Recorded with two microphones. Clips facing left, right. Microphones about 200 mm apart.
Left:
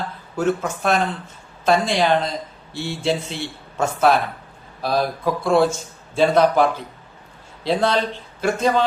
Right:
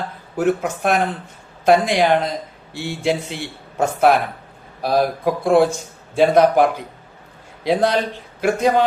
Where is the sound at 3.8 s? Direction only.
55° right (ahead or behind).